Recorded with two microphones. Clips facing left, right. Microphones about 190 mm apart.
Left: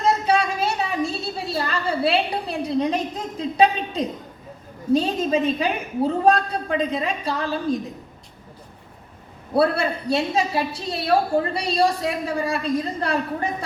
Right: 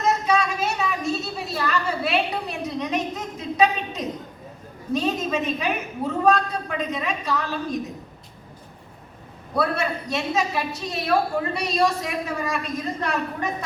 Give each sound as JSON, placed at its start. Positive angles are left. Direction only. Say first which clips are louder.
{"t": 0.0, "sound": "a sound", "louder": "left 2 dB", "side_deg": 30}
{"t": 4.9, "sound": "a man's voice", "louder": "left 2 dB", "side_deg": 30}
{"t": 9.6, "sound": "a man's voice", "louder": "left 4 dB", "side_deg": 30}